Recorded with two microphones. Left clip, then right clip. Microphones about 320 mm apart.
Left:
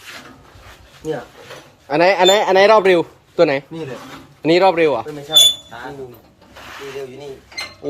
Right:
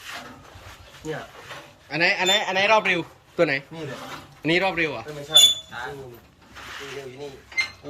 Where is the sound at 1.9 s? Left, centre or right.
Centre.